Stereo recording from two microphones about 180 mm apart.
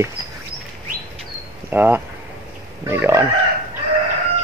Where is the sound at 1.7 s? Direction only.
10° right (ahead or behind).